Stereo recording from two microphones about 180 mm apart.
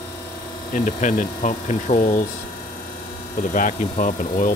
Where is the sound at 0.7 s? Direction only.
45° left (ahead or behind).